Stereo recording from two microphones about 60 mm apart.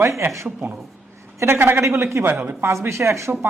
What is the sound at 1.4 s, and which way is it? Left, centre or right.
Speech, right.